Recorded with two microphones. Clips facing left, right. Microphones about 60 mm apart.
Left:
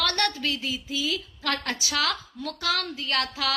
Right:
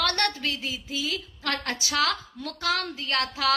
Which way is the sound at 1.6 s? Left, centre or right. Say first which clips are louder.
Right 1 dB; right.